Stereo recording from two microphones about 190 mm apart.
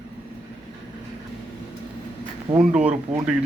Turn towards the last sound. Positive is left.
turn(degrees=-5)  # may be behind; listen again after turning